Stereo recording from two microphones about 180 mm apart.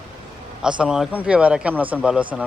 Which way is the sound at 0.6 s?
5° right (ahead or behind).